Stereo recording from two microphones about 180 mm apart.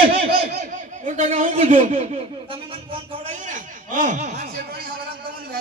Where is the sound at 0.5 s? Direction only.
40° right (ahead or behind).